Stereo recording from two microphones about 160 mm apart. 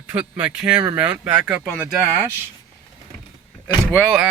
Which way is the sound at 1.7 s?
10° left (ahead or behind).